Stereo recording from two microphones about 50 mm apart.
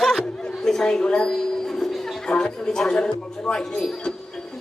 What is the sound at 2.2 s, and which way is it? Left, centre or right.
Speech, centre.